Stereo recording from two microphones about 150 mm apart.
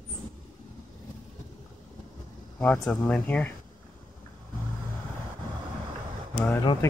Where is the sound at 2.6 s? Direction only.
10° left (ahead or behind).